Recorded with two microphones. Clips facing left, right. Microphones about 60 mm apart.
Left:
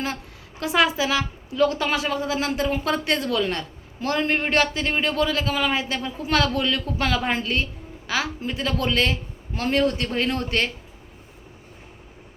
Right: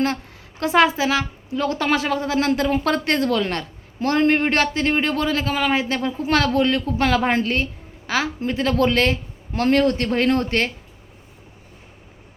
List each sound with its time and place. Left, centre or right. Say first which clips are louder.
0.6 s a man's voice: right 4 dB; right